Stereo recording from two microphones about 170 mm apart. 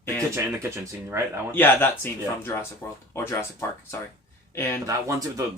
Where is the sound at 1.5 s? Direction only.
10° left (ahead or behind).